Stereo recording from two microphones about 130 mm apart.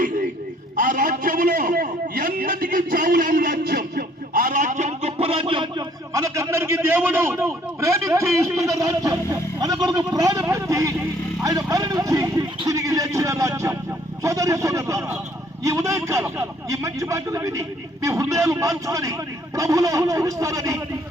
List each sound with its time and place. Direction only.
0.8 s a sound: 90° right; by 5.8 s 40° right (ahead or behind)
6.1 s a man's voice: 25° right (ahead or behind)
11.4 s vehicle: 30° right (ahead or behind)
14.2 s a man's voice: 25° right (ahead or behind)